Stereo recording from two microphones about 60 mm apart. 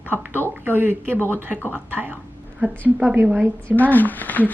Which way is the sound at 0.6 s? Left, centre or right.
Right.